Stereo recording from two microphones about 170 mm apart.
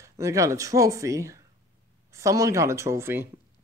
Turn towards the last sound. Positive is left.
turn(degrees=-15)  # may be behind; listen again after turning